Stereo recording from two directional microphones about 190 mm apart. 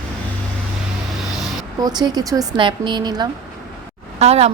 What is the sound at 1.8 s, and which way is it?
A woman's voice, 20° right (ahead or behind).